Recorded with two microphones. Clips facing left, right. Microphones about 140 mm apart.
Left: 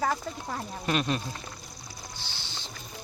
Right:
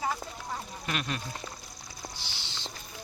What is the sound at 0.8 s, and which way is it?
Speech, 30° left (ahead or behind).